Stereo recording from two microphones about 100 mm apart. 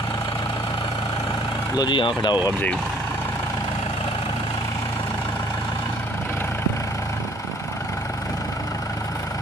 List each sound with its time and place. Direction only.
1.8 s speech: 55° left (ahead or behind)